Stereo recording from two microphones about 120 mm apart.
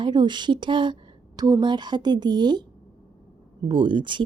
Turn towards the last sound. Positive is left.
turn(degrees=-40)  # may be behind; listen again after turning